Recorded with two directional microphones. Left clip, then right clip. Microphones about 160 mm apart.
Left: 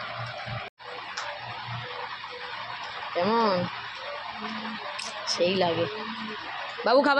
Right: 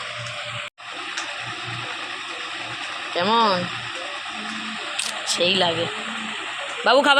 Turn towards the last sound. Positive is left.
turn(degrees=5)  # may be behind; listen again after turning